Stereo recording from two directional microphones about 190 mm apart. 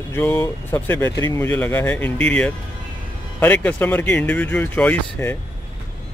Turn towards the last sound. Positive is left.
turn(degrees=10)  # may be behind; listen again after turning